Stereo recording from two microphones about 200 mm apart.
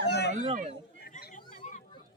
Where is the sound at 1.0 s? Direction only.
45° left (ahead or behind).